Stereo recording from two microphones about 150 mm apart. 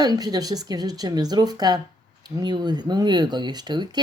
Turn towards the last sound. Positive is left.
turn(degrees=-30)  # may be behind; listen again after turning